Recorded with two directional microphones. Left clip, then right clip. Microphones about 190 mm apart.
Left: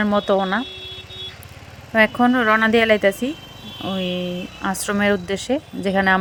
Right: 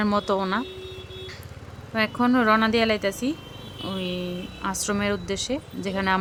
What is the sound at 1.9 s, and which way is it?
Speech, 25° left (ahead or behind).